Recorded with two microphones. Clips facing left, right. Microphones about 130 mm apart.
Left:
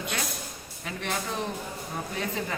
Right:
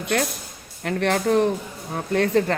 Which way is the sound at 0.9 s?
65° right (ahead or behind).